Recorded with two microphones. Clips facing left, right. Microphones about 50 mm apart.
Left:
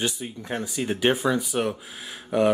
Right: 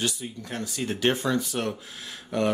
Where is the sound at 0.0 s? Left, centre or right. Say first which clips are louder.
Left 2 dB; centre.